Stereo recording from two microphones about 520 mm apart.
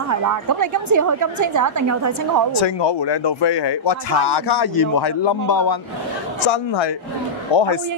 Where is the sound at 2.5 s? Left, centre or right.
Left.